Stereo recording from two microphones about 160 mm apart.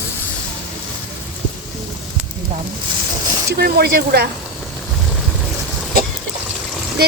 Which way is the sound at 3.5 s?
75° right (ahead or behind).